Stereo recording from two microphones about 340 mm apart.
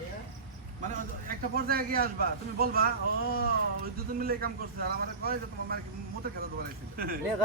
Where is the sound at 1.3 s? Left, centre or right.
Right.